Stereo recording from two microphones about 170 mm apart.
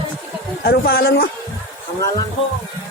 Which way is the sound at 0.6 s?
70° left (ahead or behind).